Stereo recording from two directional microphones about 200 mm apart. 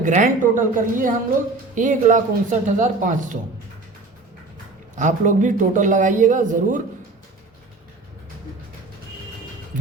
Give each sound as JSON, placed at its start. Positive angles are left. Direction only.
{"t": 0.0, "sound": "a man's voice", "side_deg": -40}
{"t": 4.9, "sound": "a man's voice", "side_deg": -40}